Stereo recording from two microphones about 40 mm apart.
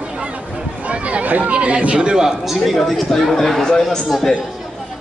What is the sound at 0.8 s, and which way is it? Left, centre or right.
Chatter, right.